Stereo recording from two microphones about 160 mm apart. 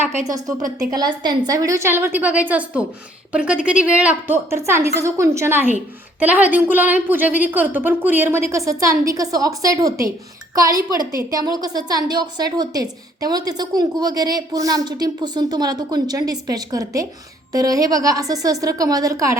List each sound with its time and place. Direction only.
0.9 s a woman's voice: 25° right (ahead or behind)